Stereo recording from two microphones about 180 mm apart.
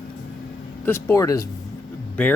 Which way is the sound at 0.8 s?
10° left (ahead or behind).